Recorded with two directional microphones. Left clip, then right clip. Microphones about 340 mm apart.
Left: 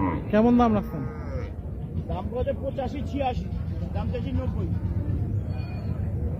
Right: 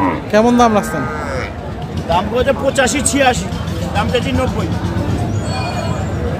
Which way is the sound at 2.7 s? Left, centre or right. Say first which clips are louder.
Right 17 dB; right.